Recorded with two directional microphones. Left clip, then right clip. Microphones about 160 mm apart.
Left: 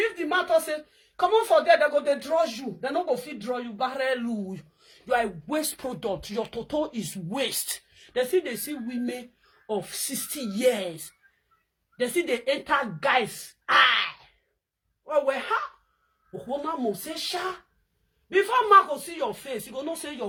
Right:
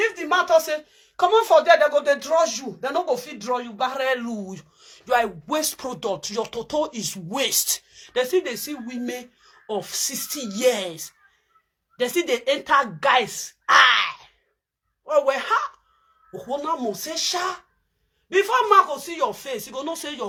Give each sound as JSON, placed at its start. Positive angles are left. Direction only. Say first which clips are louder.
{"t": 0.0, "sound": "speech", "louder": "right 4 dB", "side_deg": 20}
{"t": 8.0, "sound": "a woman's voice", "louder": "right 3 dB", "side_deg": 25}